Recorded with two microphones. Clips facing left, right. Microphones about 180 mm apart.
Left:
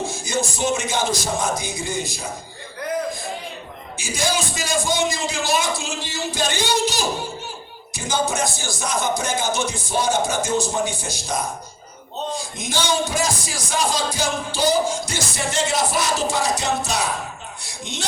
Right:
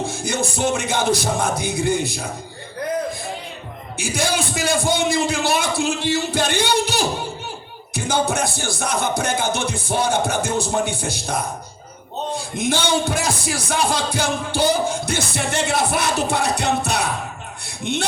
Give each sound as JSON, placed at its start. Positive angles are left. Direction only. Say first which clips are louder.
{"t": 0.0, "sound": "a man's voice", "louder": "right 1 dB", "side_deg": -60}
{"t": 3.9, "sound": "a man's voice", "louder": "right 2 dB", "side_deg": -60}